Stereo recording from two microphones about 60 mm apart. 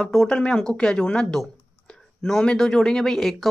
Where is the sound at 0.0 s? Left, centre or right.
Centre.